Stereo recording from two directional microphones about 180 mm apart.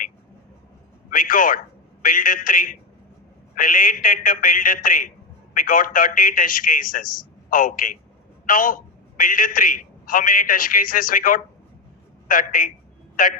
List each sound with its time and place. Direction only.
1.1 s a man's voice: 50° left (ahead or behind)